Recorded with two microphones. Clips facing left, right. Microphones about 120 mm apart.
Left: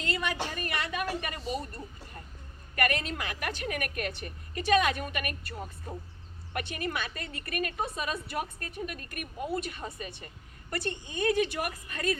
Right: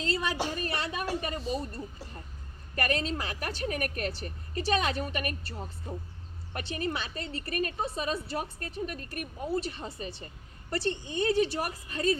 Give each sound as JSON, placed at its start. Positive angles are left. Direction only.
{"t": 0.0, "sound": "a woman's voice", "side_deg": -30}